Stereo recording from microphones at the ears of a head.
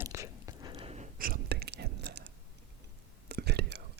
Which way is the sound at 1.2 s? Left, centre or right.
Right.